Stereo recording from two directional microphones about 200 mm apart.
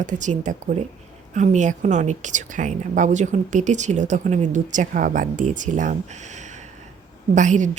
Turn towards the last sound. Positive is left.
turn(degrees=-40)  # may be behind; listen again after turning